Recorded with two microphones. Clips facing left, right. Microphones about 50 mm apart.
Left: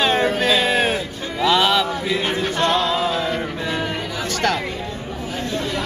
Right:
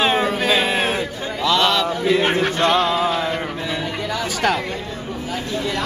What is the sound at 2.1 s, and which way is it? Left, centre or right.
Music, right.